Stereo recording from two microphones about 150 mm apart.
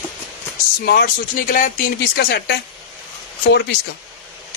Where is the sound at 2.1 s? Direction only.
90° left.